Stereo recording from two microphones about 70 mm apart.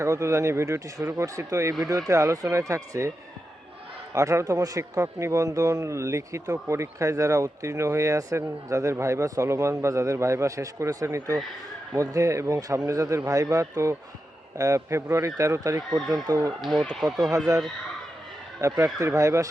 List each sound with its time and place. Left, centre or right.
0.0 s speech: right
4.1 s speech: right
16.6 s speech: centre
18.9 s speech: right